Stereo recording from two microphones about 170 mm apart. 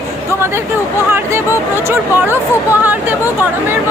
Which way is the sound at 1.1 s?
15° right (ahead or behind).